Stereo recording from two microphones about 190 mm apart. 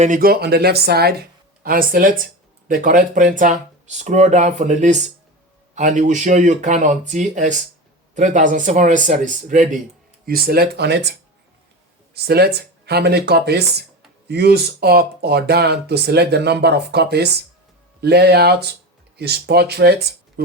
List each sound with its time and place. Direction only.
0.0 s speech: 45° right (ahead or behind)
12.1 s speech: 55° right (ahead or behind)